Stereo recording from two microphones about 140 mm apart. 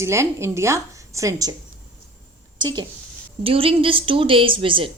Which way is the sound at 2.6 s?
30° right (ahead or behind).